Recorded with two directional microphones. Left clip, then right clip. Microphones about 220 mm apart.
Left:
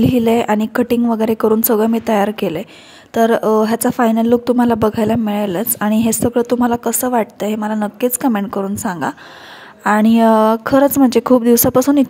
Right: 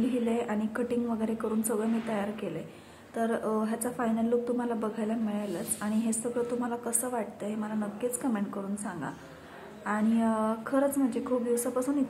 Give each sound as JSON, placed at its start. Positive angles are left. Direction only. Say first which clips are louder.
{"t": 0.1, "sound": "a woman's voice", "louder": "left 16 dB", "side_deg": 45}